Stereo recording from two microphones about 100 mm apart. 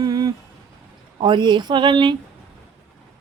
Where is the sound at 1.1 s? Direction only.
50° right (ahead or behind).